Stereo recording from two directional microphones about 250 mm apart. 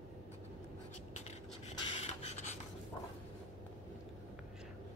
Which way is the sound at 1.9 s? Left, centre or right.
Left.